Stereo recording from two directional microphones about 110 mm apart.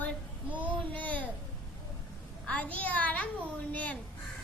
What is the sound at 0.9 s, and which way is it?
Babbling, 15° left (ahead or behind).